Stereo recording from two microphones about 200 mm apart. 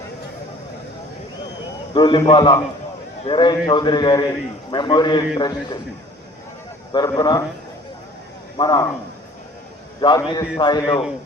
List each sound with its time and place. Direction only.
1.9 s a man's voice: 20° left (ahead or behind)
6.9 s a man's voice: 20° left (ahead or behind)
8.5 s a man's voice: 20° left (ahead or behind)
10.0 s a man's voice: 20° left (ahead or behind)
10.8 s speech: centre (ahead or behind)